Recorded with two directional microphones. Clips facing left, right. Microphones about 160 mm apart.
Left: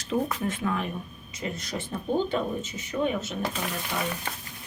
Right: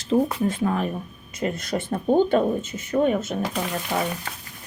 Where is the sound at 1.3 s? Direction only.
55° right (ahead or behind).